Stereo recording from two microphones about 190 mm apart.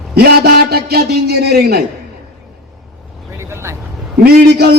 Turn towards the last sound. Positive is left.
turn(degrees=-55)  # may be behind; listen again after turning